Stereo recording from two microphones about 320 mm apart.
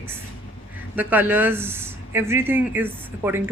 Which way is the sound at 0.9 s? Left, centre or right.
Centre.